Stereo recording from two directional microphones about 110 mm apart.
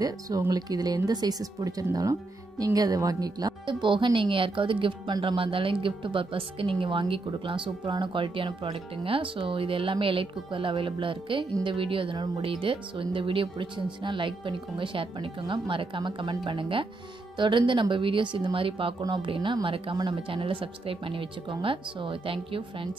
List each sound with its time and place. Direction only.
0.0 s a woman's voice: 35° right (ahead or behind); by 22.8 s 55° right (ahead or behind)